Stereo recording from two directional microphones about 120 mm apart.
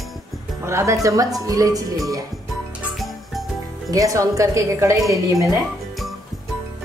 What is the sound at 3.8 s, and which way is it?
A woman's voice, 30° right (ahead or behind).